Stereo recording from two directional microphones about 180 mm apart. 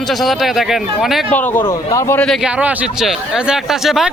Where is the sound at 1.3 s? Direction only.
10° left (ahead or behind).